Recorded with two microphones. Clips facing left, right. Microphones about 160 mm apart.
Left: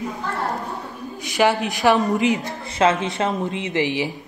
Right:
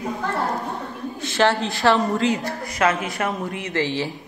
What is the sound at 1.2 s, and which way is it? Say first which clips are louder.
A woman's voice: left 1 dB; 15° left (ahead or behind).